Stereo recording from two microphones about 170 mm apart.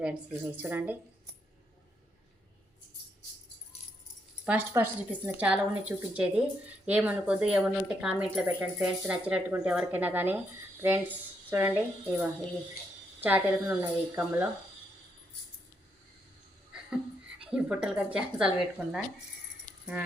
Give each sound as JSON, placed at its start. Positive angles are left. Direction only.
{"t": 0.0, "sound": "a woman's voice", "side_deg": -10}
{"t": 4.4, "sound": "a woman's voice", "side_deg": -10}
{"t": 17.4, "sound": "speech", "side_deg": -5}